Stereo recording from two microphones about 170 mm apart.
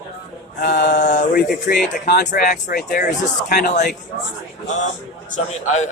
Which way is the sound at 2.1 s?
80° left.